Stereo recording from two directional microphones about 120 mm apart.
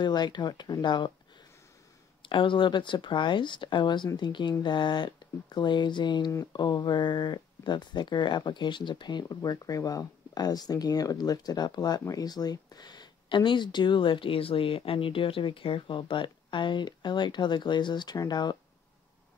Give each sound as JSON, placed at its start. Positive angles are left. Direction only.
{"t": 0.0, "sound": "speech", "side_deg": 35}
{"t": 2.2, "sound": "speech", "side_deg": 45}